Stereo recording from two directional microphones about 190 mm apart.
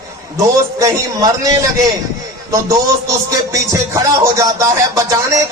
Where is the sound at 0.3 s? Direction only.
15° right (ahead or behind).